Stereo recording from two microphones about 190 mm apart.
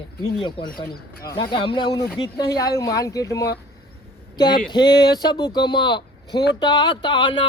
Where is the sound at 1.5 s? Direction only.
25° left (ahead or behind).